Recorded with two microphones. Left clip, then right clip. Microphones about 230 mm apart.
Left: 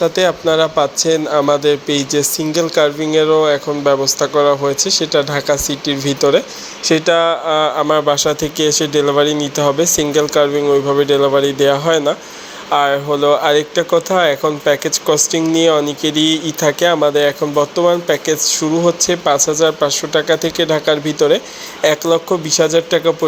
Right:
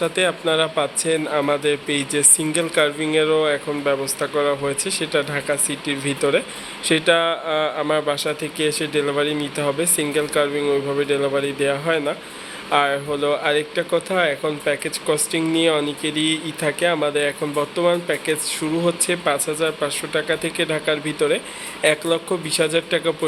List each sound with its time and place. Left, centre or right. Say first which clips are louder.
0.0 s speech: left 6 dB; centre